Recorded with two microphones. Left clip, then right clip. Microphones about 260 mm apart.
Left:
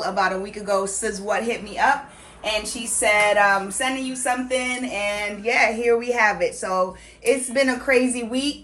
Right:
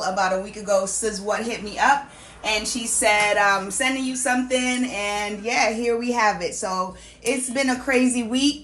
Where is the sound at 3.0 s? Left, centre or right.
Right.